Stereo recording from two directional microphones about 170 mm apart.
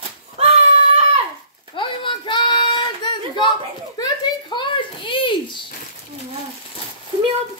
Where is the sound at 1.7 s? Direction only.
30° left (ahead or behind).